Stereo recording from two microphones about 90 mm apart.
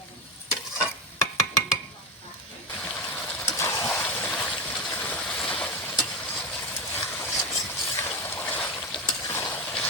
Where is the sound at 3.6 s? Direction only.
35° left (ahead or behind).